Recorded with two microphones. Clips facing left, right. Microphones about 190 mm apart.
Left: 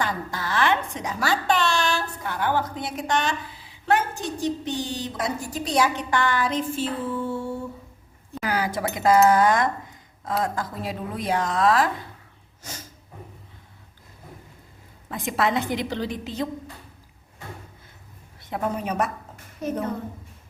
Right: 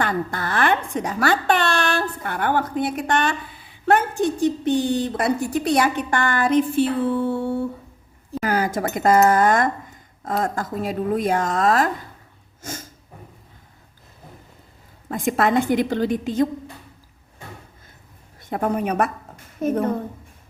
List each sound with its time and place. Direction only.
0.0 s a woman's voice: 55° right (ahead or behind)
8.4 s a woman's voice: 45° right (ahead or behind)
15.1 s a woman's voice: 50° right (ahead or behind)
18.3 s a woman's voice: 50° right (ahead or behind)